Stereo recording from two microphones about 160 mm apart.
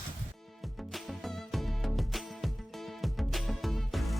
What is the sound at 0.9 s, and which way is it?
Music, centre (ahead or behind).